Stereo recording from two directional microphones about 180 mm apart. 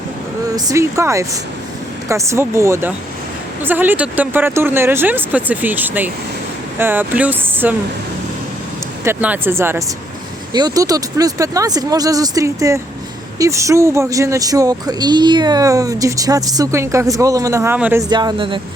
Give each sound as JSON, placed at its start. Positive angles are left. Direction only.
{"t": 0.5, "sound": "speech", "side_deg": -15}
{"t": 9.0, "sound": "speech", "side_deg": -10}
{"t": 18.1, "sound": "speech", "side_deg": -25}